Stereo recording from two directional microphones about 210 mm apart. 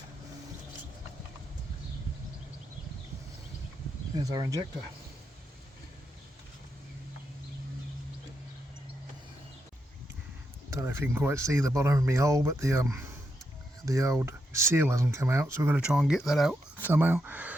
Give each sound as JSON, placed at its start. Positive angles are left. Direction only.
{"t": 4.1, "sound": "speech", "side_deg": -20}
{"t": 10.7, "sound": "speech", "side_deg": -10}